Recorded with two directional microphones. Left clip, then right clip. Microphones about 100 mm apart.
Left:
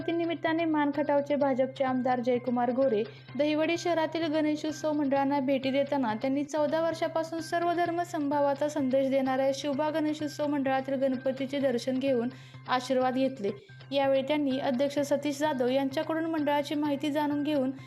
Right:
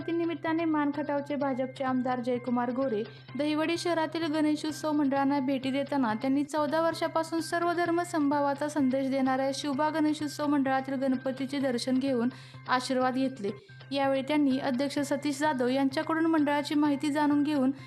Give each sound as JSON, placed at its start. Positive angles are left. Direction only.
{"t": 0.1, "sound": "a sound", "side_deg": -15}
{"t": 0.6, "sound": "a woman's voice", "side_deg": -15}
{"t": 10.6, "sound": "a woman's voice", "side_deg": -35}